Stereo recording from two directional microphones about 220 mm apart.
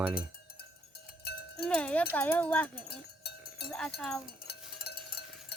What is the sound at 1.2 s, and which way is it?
Cowbell, 45° left (ahead or behind).